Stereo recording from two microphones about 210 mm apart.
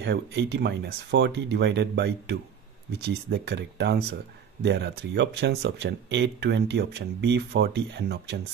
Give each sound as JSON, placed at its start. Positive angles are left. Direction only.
{"t": 0.0, "sound": "speech", "side_deg": -55}